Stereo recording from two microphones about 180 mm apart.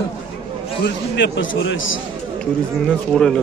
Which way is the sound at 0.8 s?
80° left.